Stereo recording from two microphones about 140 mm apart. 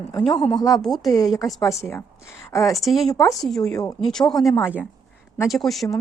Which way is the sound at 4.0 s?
5° left (ahead or behind).